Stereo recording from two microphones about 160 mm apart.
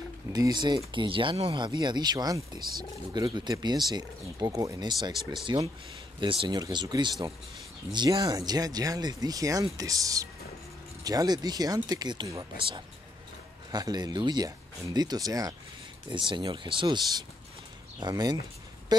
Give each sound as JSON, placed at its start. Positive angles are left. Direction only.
{"t": 0.3, "sound": "speech", "side_deg": -25}